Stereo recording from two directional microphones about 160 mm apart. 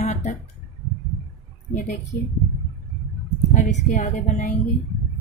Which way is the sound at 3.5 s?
50° left (ahead or behind).